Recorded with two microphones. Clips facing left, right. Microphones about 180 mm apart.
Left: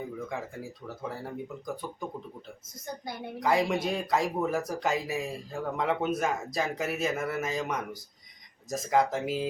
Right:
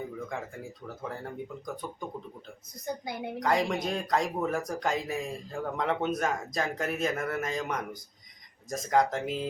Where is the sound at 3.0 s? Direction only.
15° right (ahead or behind).